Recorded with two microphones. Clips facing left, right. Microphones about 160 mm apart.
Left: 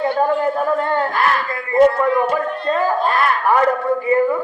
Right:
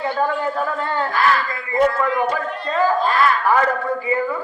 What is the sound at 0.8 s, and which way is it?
Speech, 50° left (ahead or behind).